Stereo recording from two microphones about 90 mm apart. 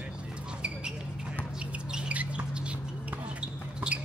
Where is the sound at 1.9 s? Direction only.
10° right (ahead or behind).